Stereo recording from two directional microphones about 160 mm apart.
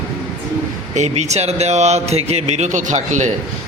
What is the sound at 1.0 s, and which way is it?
A man's voice, 45° right (ahead or behind).